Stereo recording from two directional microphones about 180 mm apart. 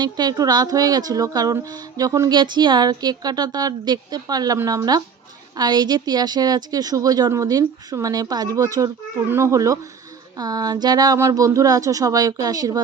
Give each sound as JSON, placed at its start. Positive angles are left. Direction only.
{"t": 0.0, "sound": "speech", "side_deg": -20}